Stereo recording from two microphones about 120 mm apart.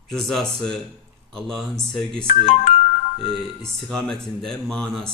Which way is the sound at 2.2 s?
90° left.